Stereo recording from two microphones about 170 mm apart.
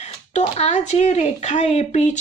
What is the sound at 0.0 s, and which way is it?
A woman's voice, 40° left (ahead or behind).